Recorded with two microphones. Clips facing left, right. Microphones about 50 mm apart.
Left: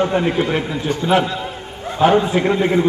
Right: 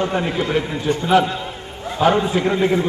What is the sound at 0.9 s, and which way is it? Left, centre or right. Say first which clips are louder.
Speech: right 4 dB; right.